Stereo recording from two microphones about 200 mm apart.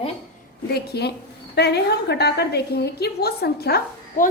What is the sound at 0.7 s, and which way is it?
A woman's voice, 55° left (ahead or behind).